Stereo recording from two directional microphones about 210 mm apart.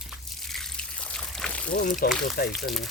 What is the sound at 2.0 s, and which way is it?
Speech, 45° left (ahead or behind).